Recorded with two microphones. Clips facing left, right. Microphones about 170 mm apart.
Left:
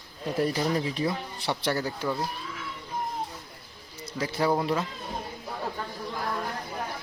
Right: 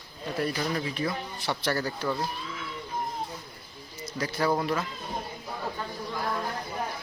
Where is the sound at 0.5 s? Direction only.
20° left (ahead or behind).